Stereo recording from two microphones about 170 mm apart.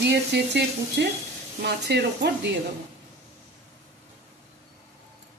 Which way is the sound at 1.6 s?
80° right.